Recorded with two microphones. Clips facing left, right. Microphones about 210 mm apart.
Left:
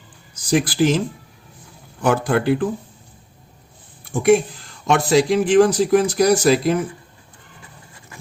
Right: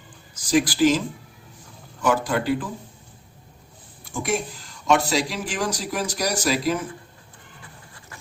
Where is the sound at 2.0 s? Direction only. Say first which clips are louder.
Left 4 dB; 55° left (ahead or behind).